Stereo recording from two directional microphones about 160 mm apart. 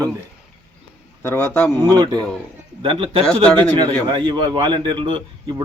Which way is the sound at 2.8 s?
35° right (ahead or behind).